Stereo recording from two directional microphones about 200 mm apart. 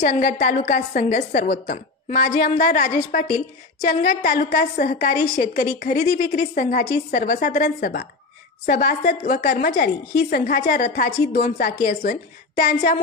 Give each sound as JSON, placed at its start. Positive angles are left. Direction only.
{"t": 0.0, "sound": "a woman's voice", "side_deg": 35}